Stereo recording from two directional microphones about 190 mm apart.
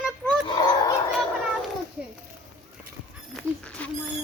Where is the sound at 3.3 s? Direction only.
5° left (ahead or behind).